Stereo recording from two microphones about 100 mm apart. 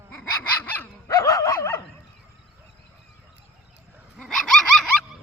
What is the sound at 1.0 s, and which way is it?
Dog, 35° left (ahead or behind).